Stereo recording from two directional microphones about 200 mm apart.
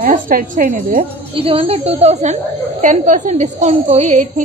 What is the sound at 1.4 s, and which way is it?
A woman's voice, 30° right (ahead or behind).